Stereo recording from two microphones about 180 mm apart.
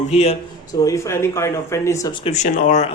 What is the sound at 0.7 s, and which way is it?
Speech, 15° left (ahead or behind).